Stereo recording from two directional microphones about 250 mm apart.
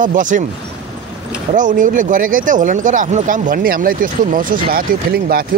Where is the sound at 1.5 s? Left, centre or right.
Right.